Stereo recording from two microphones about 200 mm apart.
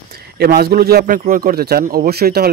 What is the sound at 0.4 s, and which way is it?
Speech, 50° right (ahead or behind).